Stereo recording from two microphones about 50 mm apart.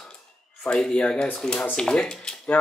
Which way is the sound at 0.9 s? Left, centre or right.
Centre.